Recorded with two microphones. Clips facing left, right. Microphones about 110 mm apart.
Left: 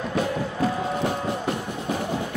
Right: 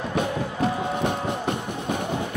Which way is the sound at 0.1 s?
20° right (ahead or behind).